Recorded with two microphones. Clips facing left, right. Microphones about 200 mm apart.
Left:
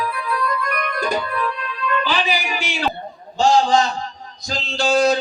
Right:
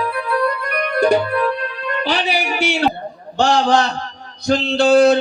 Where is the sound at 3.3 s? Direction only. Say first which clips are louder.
Right 1 dB; 70° right (ahead or behind).